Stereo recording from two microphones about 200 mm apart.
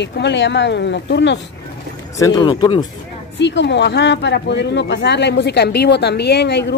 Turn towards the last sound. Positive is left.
turn(degrees=60)  # may be behind; listen again after turning